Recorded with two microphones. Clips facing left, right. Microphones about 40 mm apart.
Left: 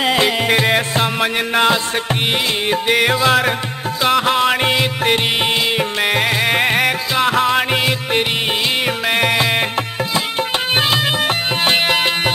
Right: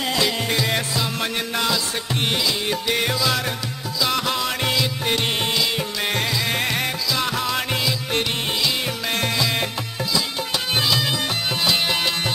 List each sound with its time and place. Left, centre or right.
0.0 s music: left
10.7 s music: left